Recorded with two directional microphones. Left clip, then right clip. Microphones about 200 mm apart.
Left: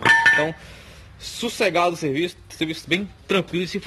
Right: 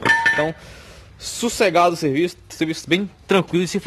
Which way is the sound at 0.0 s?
25° right (ahead or behind).